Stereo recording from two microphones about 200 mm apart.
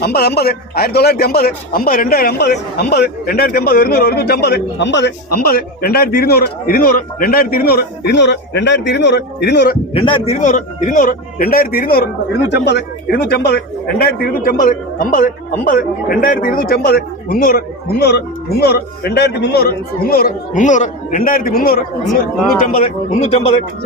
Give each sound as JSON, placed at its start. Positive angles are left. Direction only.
{"t": 0.0, "sound": "speech", "side_deg": 50}
{"t": 9.9, "sound": "speech", "side_deg": 25}
{"t": 18.6, "sound": "speech", "side_deg": 55}